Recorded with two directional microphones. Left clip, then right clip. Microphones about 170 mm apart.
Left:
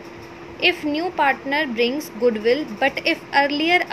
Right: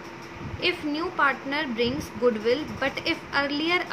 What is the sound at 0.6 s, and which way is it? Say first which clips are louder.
A woman's voice: left 7 dB; 20° left (ahead or behind).